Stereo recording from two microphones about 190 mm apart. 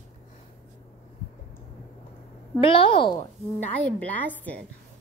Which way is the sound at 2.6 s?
30° left (ahead or behind).